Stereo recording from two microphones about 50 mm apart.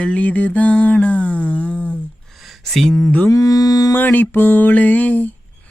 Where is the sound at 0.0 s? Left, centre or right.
Left.